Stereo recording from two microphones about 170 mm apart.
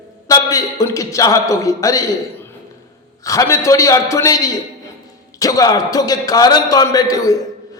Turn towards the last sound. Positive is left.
turn(degrees=20)  # may be behind; listen again after turning